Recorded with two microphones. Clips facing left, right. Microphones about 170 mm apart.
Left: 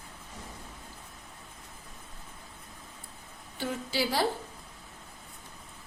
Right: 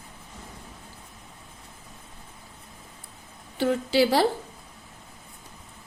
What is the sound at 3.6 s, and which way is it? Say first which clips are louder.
Speech: right 10 dB; 75° right (ahead or behind).